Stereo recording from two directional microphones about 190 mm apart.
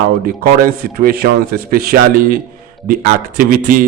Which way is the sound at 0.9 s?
50° right (ahead or behind).